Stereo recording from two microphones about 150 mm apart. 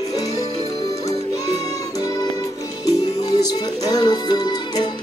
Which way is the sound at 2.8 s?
25° left (ahead or behind).